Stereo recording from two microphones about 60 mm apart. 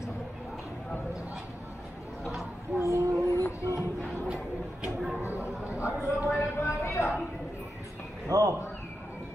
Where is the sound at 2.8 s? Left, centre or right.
Right.